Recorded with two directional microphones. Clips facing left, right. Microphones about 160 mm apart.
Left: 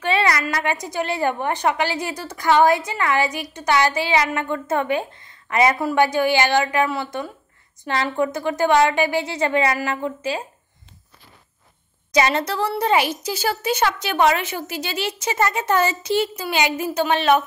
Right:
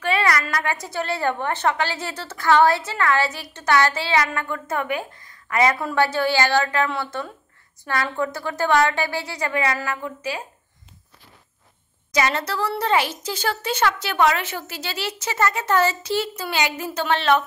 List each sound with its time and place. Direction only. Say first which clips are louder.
0.0 s a woman's voice: left 1 dB; 25° left (ahead or behind)
12.1 s a woman's voice: left 3 dB; 20° left (ahead or behind)